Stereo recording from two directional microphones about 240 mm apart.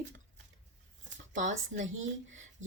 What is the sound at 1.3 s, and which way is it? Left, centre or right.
Speech, right.